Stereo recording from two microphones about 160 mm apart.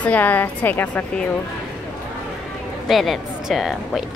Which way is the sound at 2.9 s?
Centre (ahead or behind).